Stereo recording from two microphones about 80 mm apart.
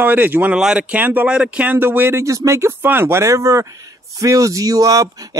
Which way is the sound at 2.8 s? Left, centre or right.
Right.